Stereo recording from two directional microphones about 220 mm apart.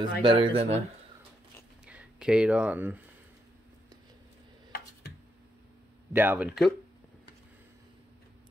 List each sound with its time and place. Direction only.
0.2 s speech: 25° right (ahead or behind)
1.9 s speech: 5° right (ahead or behind)
6.1 s speech: 10° right (ahead or behind)